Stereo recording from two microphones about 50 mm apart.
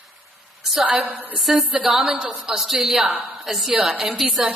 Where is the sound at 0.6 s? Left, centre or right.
Centre.